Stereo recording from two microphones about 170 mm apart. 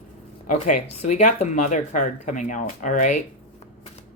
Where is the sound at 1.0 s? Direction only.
45° left (ahead or behind).